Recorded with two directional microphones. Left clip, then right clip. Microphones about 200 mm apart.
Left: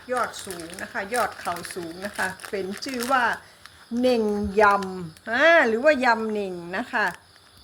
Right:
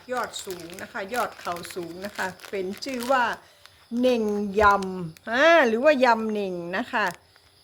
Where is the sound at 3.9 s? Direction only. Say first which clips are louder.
Left 1 dB; 40° right (ahead or behind).